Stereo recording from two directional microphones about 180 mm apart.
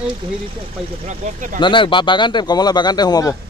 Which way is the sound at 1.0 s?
40° right (ahead or behind).